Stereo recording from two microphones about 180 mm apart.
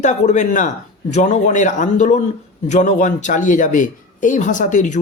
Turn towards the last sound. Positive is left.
turn(degrees=45)  # may be behind; listen again after turning